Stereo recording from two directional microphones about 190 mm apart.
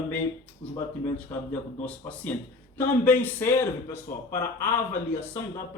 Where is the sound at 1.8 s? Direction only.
10° left (ahead or behind).